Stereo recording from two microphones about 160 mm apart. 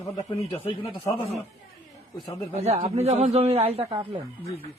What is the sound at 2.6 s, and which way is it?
A man's voice, 40° right (ahead or behind).